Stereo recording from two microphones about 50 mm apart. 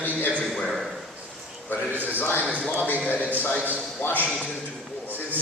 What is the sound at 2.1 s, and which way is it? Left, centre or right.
Speech, left.